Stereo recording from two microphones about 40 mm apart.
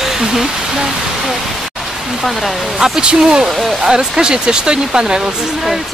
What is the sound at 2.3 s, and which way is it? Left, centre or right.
Speech, centre.